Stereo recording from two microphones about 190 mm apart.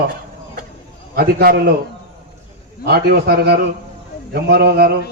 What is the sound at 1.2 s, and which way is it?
Speech, 55° right (ahead or behind).